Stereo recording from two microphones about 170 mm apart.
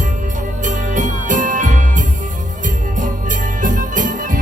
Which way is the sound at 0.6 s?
50° right (ahead or behind).